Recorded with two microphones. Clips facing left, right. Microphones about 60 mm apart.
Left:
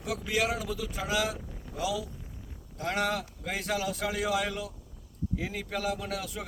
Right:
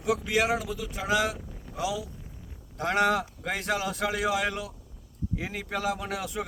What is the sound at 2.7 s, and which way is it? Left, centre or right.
Speech, right.